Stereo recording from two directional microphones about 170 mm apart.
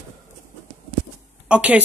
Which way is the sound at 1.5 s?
10° right (ahead or behind).